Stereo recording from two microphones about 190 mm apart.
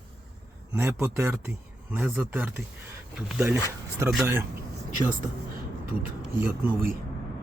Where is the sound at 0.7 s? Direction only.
10° right (ahead or behind).